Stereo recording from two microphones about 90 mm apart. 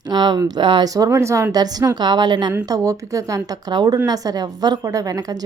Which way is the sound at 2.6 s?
40° right (ahead or behind).